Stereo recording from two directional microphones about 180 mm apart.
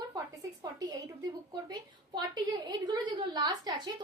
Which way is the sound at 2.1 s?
25° right (ahead or behind).